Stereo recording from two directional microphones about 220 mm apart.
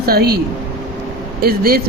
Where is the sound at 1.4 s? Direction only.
45° right (ahead or behind).